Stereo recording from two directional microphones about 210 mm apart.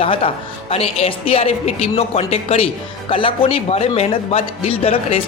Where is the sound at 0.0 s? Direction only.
25° left (ahead or behind).